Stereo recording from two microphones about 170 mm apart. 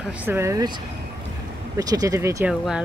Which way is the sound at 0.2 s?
15° right (ahead or behind).